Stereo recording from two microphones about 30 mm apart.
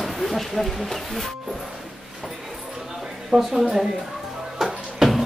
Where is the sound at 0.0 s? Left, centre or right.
Centre.